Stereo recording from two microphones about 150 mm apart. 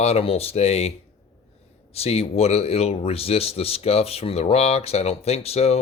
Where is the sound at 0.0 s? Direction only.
40° left (ahead or behind).